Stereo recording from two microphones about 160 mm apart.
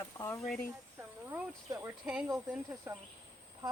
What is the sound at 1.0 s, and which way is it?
Speech, 15° right (ahead or behind).